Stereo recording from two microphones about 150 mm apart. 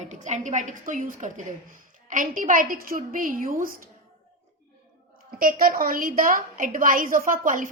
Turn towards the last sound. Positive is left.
turn(degrees=-65)  # may be behind; listen again after turning